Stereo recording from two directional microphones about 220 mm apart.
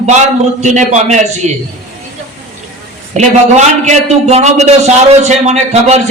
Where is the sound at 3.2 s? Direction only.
30° right (ahead or behind).